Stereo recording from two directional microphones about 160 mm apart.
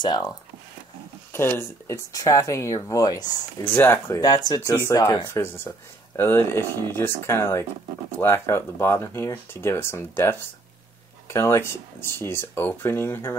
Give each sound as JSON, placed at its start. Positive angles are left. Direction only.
{"t": 0.0, "sound": "speech", "side_deg": 25}
{"t": 1.3, "sound": "speech", "side_deg": 15}
{"t": 3.7, "sound": "speech", "side_deg": 15}